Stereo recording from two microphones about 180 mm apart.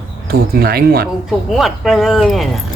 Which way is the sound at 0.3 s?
55° right (ahead or behind).